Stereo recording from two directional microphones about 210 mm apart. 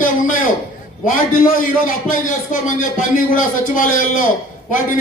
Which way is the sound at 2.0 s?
40° left (ahead or behind).